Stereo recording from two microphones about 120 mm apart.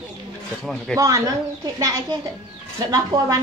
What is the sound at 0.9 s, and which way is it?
Speech, 30° right (ahead or behind).